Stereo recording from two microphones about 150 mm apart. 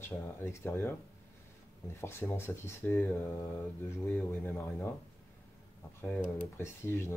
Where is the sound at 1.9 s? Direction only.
15° left (ahead or behind).